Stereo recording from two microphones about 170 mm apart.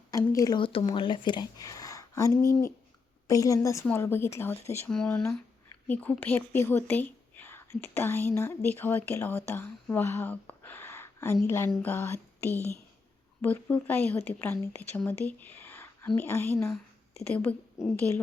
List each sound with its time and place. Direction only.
0.1 s a woman's voice: 20° left (ahead or behind)